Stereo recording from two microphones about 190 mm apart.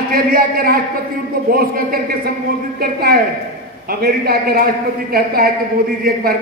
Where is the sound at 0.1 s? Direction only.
50° right (ahead or behind).